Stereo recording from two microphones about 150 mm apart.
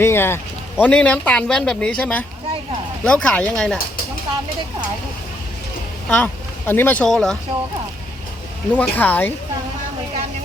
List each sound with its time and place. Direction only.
0.0 s speech: 15° left (ahead or behind)
6.1 s speech: 10° left (ahead or behind)
8.7 s speech: 10° left (ahead or behind)